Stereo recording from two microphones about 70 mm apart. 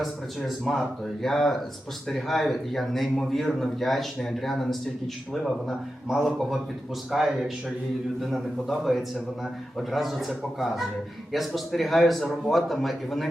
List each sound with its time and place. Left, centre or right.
0.0 s a man's voice: centre